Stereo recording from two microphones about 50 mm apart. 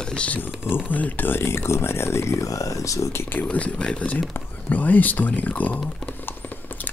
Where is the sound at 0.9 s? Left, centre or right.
Left.